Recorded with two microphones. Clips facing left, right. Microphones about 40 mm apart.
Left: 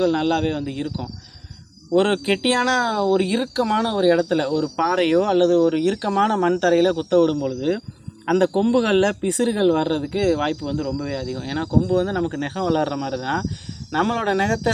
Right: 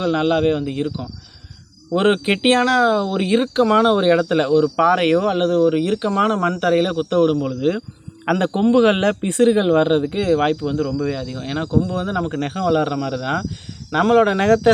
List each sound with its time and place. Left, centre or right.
0.0 s speech: right
5.1 s speech: centre
14.4 s speech: right